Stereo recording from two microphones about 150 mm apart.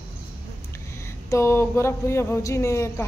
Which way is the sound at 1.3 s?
20° left (ahead or behind).